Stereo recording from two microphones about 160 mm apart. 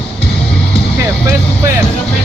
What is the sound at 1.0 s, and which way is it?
Vehicle, 20° right (ahead or behind).